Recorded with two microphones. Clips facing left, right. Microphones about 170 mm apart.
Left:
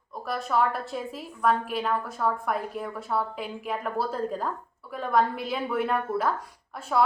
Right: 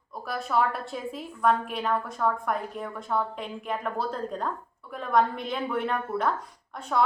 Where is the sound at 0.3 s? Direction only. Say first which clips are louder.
Left 1 dB; centre (ahead or behind).